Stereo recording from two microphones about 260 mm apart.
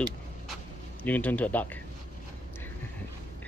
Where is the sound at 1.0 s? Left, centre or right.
Centre.